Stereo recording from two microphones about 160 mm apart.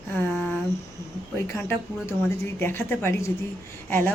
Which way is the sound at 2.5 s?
15° left (ahead or behind).